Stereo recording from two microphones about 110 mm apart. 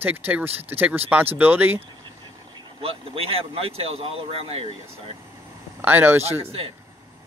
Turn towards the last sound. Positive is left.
turn(degrees=-25)  # may be behind; listen again after turning